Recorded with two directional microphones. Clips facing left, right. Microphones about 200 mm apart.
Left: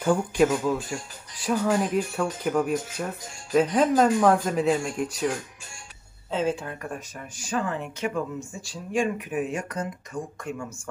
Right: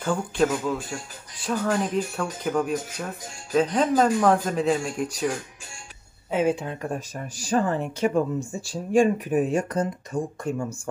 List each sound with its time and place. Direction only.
0.0 s speech: 10° left (ahead or behind)
6.3 s speech: 15° right (ahead or behind); by 10.7 s 30° right (ahead or behind)